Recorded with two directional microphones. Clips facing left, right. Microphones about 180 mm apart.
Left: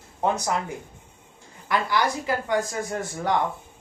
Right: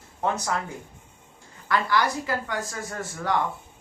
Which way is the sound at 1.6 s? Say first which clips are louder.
Even; 20° left (ahead or behind).